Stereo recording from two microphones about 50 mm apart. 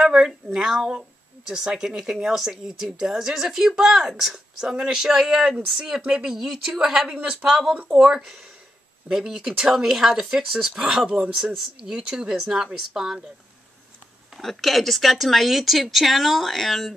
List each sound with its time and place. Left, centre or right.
0.0 s speech: centre
7.7 s speech: right
8.0 s speech: centre
14.4 s speech: centre